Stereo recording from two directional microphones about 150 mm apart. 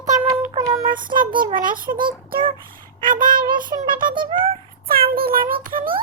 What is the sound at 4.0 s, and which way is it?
Speech, 70° right (ahead or behind).